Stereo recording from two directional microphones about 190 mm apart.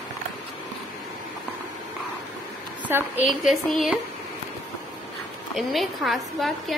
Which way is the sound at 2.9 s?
10° right (ahead or behind).